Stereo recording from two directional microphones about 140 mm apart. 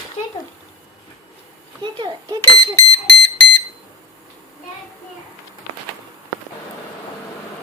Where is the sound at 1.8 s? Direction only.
35° right (ahead or behind).